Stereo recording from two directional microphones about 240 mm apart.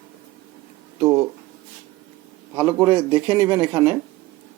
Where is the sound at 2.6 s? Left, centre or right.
Centre.